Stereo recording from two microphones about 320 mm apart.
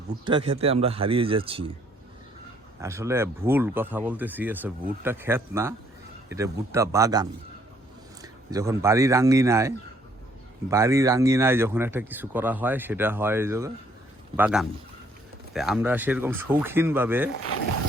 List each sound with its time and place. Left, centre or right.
0.3 s speech: centre
2.8 s speech: centre